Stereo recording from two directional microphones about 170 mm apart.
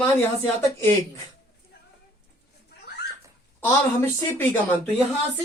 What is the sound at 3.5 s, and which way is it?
Speech, 10° left (ahead or behind).